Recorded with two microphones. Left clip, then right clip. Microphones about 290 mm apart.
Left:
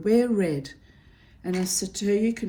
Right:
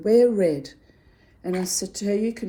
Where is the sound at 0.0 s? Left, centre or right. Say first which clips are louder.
Right 5 dB; centre.